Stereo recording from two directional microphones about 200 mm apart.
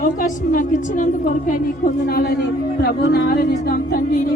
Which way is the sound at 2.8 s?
50° left (ahead or behind).